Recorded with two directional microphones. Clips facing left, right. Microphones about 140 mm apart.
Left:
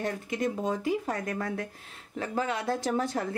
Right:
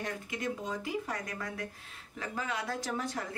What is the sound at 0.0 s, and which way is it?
Speech, 45° left (ahead or behind).